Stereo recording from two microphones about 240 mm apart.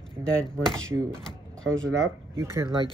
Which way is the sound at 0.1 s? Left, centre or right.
Centre.